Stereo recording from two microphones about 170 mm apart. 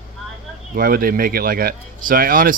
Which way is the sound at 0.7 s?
60° right (ahead or behind).